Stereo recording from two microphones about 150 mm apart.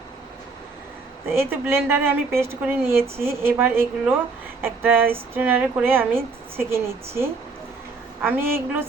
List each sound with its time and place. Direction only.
1.3 s a woman's voice: 15° right (ahead or behind)